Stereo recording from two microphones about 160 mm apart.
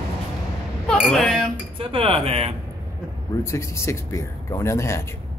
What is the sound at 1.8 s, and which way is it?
Speech, 35° right (ahead or behind).